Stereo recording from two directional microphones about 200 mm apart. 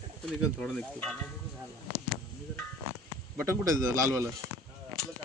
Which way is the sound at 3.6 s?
15° right (ahead or behind).